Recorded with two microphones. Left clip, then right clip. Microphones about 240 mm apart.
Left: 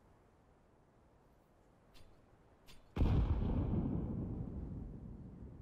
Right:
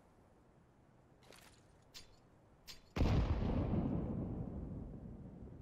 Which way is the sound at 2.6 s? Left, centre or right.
Right.